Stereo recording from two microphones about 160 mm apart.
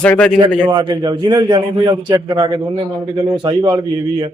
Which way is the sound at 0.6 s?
25° right (ahead or behind).